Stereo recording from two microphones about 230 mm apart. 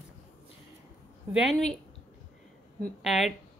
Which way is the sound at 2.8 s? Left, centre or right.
Centre.